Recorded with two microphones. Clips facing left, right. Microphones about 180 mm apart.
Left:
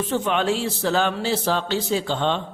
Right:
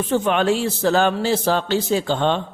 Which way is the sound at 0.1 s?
50° right (ahead or behind).